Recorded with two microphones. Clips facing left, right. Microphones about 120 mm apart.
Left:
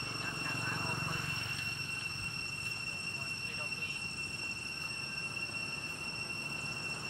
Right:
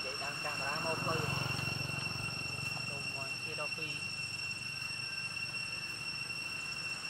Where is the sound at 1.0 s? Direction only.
35° right (ahead or behind).